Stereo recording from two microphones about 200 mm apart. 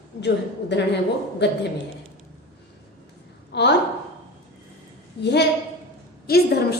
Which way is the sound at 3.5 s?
55° left (ahead or behind).